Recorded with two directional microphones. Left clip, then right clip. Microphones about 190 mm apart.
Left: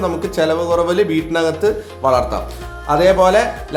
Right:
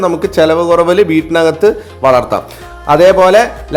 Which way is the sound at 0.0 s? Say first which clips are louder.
Right 7 dB; 35° right (ahead or behind).